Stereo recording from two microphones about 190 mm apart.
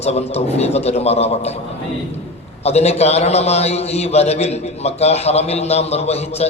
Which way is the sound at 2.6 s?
35° left (ahead or behind).